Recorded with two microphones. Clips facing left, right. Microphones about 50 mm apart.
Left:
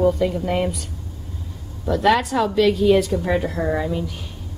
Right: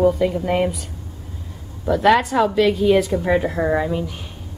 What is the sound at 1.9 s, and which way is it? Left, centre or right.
A woman's voice, centre.